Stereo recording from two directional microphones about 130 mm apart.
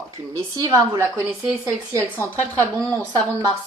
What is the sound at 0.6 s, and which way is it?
Speech, 25° right (ahead or behind).